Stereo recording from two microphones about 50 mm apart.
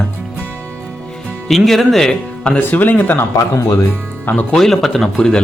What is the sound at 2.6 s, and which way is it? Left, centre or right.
Speech, left.